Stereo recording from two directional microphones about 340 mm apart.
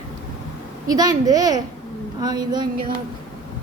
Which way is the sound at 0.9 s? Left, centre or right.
Centre.